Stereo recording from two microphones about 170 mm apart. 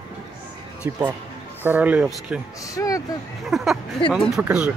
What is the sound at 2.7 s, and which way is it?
Speech, 20° left (ahead or behind).